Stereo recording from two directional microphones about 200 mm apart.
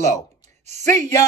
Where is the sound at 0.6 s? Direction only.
35° right (ahead or behind).